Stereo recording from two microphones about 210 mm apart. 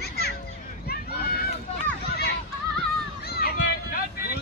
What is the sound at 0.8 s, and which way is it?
Run, 45° left (ahead or behind).